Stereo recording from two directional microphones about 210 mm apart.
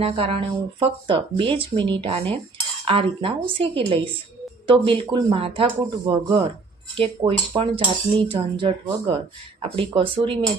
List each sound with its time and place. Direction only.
0.0 s speech: 25° right (ahead or behind)